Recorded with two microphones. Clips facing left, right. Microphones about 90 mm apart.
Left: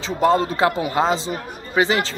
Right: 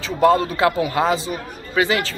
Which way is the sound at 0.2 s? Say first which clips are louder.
Right 2 dB; 25° left (ahead or behind).